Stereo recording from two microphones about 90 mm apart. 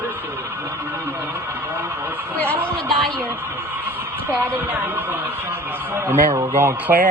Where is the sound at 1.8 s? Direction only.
25° right (ahead or behind).